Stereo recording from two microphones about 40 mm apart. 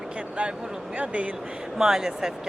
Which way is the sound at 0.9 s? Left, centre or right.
Right.